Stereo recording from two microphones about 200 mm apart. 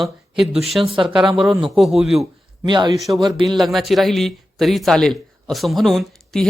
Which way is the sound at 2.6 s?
20° right (ahead or behind).